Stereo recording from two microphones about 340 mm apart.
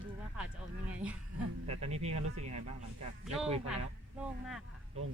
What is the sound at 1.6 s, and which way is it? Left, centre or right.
Speech, centre.